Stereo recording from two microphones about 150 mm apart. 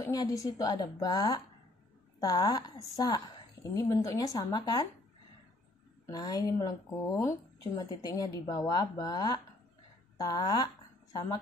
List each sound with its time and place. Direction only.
0.0 s speech: 25° left (ahead or behind)
6.0 s speech: 25° left (ahead or behind)